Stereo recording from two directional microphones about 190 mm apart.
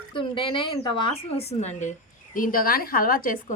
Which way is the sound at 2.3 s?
50° left (ahead or behind).